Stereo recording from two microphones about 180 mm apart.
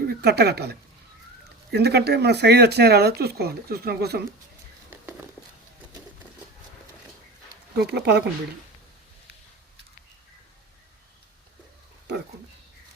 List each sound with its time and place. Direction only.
0.1 s speech: 65° right (ahead or behind)
7.8 s speech: 65° right (ahead or behind)